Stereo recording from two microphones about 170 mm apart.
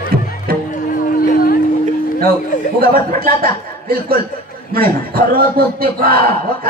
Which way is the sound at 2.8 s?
60° right (ahead or behind).